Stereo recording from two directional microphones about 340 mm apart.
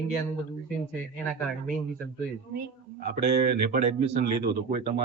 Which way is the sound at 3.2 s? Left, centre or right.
Right.